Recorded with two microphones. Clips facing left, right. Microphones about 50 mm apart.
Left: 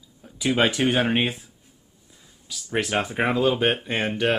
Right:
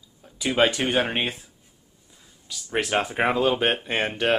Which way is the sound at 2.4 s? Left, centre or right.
Centre.